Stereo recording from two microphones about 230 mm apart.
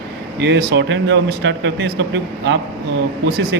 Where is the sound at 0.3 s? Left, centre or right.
Right.